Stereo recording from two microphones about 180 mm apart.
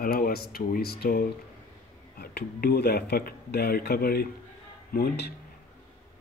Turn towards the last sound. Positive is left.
turn(degrees=60)  # may be behind; listen again after turning